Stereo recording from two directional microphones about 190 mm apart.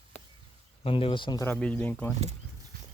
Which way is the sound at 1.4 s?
10° left (ahead or behind).